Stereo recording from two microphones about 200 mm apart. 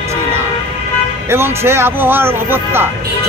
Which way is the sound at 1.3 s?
10° right (ahead or behind).